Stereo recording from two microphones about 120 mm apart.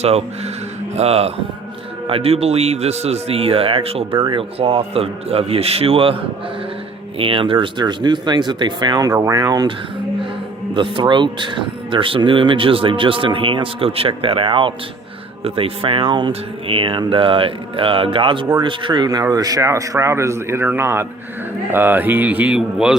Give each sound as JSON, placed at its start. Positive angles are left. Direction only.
{"t": 0.0, "sound": "speech", "side_deg": -60}
{"t": 7.2, "sound": "speech", "side_deg": -50}
{"t": 10.8, "sound": "speech", "side_deg": -45}